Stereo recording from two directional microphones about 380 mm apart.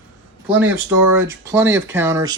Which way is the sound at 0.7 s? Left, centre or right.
Centre.